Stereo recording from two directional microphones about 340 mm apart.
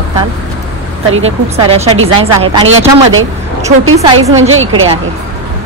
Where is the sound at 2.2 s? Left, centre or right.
Centre.